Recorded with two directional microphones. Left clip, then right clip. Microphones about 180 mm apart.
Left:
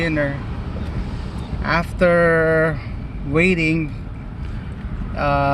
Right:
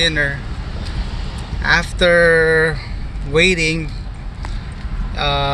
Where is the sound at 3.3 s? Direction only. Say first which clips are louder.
Right 4 dB; 50° right (ahead or behind).